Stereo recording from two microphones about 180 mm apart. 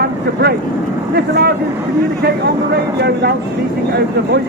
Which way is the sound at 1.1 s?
65° right (ahead or behind).